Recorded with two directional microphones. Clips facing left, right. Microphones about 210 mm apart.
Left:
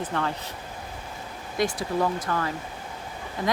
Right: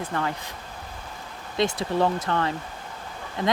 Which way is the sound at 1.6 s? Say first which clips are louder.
Right 2 dB; 25° right (ahead or behind).